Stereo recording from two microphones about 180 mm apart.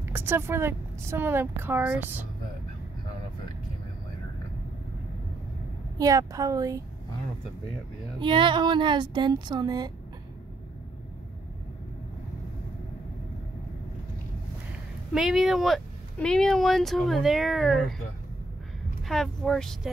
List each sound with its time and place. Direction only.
0.0 s a woman's voice: 10° right (ahead or behind)
5.9 s speech: 20° right (ahead or behind)
8.2 s speech: 25° right (ahead or behind)
15.1 s speech: centre (ahead or behind)
19.0 s speech: centre (ahead or behind)